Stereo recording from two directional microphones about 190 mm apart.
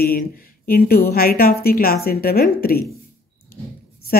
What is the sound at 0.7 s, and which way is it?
Speech, 55° left (ahead or behind).